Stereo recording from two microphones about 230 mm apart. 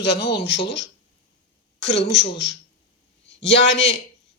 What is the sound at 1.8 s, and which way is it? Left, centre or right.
A woman's voice, left.